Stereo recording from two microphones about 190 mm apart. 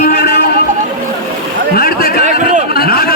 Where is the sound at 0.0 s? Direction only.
55° left (ahead or behind).